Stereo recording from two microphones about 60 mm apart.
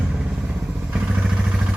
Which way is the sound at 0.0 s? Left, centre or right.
Centre.